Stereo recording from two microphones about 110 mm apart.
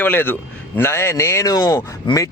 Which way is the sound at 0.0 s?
15° left (ahead or behind).